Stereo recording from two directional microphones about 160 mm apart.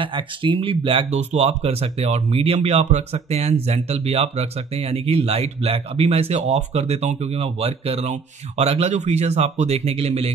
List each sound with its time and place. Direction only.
0.0 s speech: 30° right (ahead or behind)